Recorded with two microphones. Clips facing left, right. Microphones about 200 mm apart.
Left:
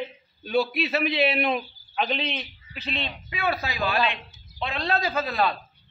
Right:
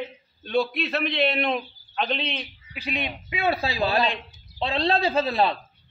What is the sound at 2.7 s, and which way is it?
Speech, 10° right (ahead or behind).